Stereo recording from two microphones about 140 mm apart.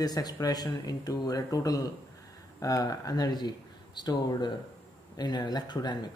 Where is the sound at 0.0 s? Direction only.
30° left (ahead or behind).